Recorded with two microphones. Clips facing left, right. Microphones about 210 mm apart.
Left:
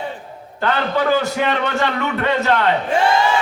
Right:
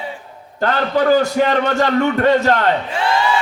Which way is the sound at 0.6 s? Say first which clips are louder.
Right 2 dB; 45° right (ahead or behind).